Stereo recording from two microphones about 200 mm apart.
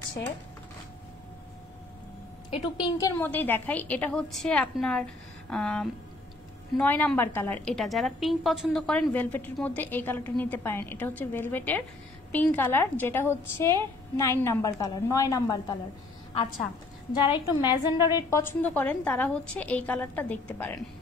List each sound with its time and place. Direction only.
2.6 s a woman's voice: 20° left (ahead or behind)
17.1 s a woman's voice: 20° left (ahead or behind)